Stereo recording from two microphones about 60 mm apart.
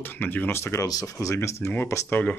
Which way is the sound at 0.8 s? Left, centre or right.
Left.